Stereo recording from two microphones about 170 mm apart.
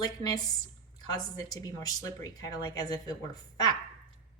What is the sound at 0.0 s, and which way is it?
Speech, 20° left (ahead or behind).